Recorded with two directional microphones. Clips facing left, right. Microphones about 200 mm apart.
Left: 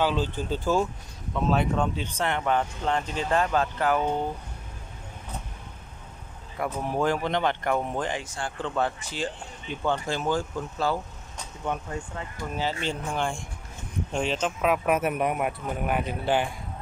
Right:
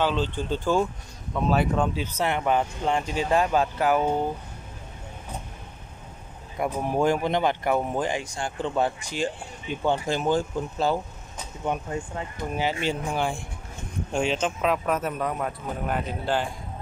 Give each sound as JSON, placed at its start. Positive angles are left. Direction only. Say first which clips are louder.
{"t": 0.0, "sound": "speech", "louder": "right 1 dB", "side_deg": 10}
{"t": 6.6, "sound": "speech", "louder": "right 3 dB", "side_deg": -15}
{"t": 12.4, "sound": "a man's voice", "louder": "right 3 dB", "side_deg": -20}